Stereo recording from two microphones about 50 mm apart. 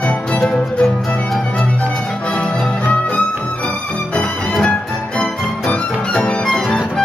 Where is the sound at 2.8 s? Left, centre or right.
Left.